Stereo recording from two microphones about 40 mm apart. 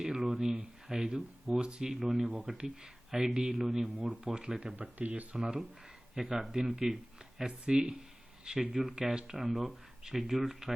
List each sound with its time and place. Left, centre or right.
0.0 s a sound: centre
0.9 s speech: centre
4.8 s speech: right
5.3 s speech: centre
9.2 s speech: centre